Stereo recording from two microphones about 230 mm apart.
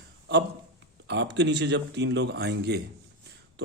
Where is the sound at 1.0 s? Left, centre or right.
Right.